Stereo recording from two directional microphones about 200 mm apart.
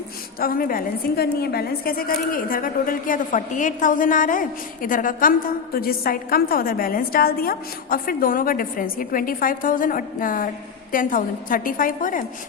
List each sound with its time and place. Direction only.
0.3 s a woman's voice: 45° left (ahead or behind)